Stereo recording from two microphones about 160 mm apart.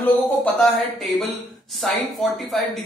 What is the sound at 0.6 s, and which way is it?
Speech, centre (ahead or behind).